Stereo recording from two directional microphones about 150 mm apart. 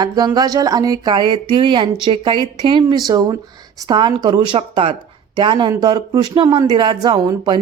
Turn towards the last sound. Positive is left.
turn(degrees=-30)  # may be behind; listen again after turning